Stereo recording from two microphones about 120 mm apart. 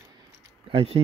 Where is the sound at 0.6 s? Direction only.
50° right (ahead or behind).